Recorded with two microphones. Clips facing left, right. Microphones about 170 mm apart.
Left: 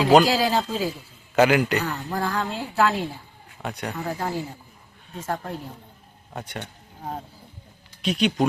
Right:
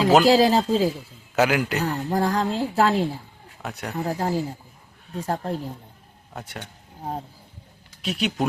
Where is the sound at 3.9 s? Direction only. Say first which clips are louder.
Right 6 dB; 35° right (ahead or behind).